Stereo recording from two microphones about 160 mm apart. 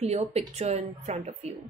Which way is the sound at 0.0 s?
40° right (ahead or behind).